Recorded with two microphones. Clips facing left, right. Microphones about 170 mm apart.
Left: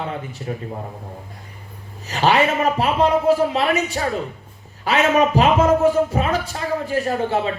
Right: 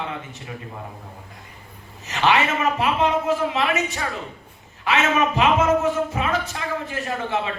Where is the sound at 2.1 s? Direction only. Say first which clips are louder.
Left 3 dB; 35° left (ahead or behind).